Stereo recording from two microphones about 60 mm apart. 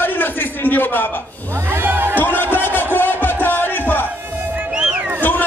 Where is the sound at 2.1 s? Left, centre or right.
Left.